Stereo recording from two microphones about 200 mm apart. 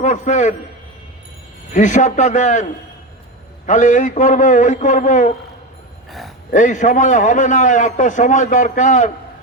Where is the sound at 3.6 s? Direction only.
40° left (ahead or behind).